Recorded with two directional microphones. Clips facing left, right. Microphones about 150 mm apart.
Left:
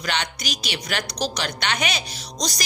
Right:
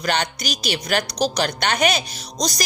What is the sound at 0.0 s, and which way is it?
Speech, 45° right (ahead or behind).